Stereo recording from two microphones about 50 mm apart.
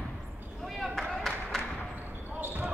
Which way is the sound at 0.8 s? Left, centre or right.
Centre.